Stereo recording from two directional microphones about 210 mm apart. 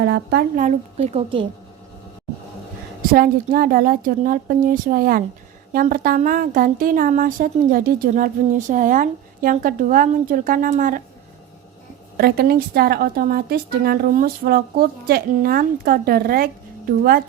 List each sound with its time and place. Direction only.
0.0 s a woman's voice: 55° right (ahead or behind); by 1.5 s 25° right (ahead or behind)
3.1 s a woman's voice: 45° right (ahead or behind)
12.1 s a woman's voice: 50° right (ahead or behind)